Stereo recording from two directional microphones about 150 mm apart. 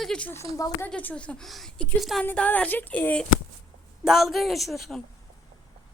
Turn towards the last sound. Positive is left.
turn(degrees=0)  # may be behind; listen again after turning